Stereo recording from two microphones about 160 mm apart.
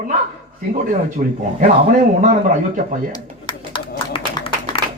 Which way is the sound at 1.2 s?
50° right (ahead or behind).